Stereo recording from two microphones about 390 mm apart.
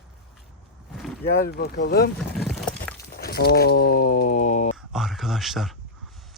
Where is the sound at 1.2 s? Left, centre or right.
Left.